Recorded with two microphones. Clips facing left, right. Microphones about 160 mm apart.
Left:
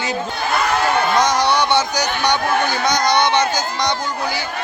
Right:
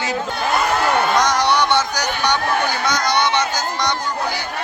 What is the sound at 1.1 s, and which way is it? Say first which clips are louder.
Speech: left 1 dB; 10° left (ahead or behind).